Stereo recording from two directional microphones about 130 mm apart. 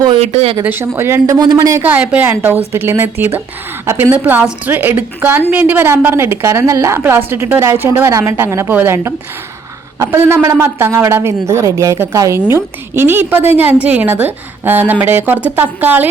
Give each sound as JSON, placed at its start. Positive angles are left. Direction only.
{"t": 0.2, "sound": "speech", "side_deg": -45}
{"t": 0.6, "sound": "a woman's voice", "side_deg": -15}
{"t": 1.8, "sound": "a woman's voice", "side_deg": -10}